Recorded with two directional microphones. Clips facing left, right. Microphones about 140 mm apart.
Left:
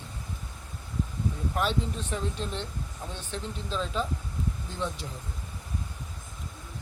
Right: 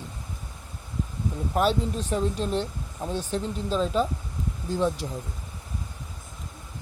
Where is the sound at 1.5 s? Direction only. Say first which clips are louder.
Right 7 dB; 40° right (ahead or behind).